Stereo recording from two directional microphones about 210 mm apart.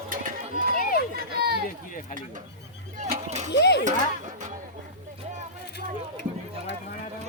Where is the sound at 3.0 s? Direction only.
35° right (ahead or behind).